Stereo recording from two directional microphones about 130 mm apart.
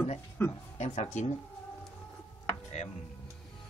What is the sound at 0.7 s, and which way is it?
Speech, 60° left (ahead or behind).